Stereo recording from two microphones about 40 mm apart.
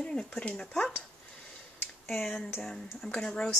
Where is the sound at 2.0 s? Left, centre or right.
Centre.